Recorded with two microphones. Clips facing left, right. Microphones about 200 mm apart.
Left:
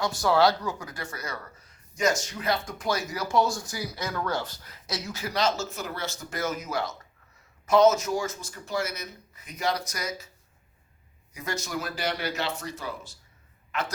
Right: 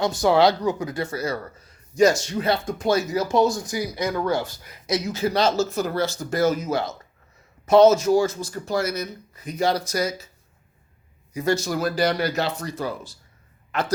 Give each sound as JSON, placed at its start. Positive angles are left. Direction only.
{"t": 0.0, "sound": "speech", "side_deg": -20}
{"t": 11.3, "sound": "speech", "side_deg": -30}
{"t": 13.7, "sound": "a sound", "side_deg": -35}